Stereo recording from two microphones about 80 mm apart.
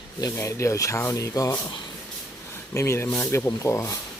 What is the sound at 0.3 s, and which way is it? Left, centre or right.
Speech, left.